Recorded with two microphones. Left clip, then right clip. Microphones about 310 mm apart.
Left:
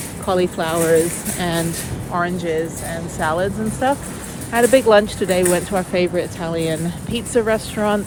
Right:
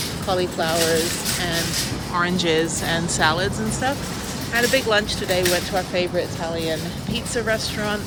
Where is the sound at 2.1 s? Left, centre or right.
Centre.